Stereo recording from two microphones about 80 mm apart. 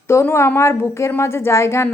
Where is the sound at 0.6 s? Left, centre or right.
Left.